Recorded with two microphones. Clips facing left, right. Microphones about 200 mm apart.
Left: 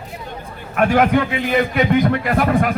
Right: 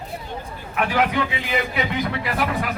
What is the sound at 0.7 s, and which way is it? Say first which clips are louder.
A man's voice: left 7 dB; 50° left (ahead or behind).